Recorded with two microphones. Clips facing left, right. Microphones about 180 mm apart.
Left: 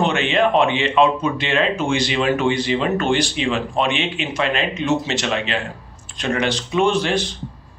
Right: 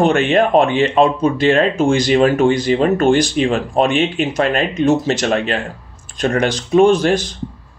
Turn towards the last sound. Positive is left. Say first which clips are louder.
# right 6 dB
turn(degrees=-45)  # may be behind; listen again after turning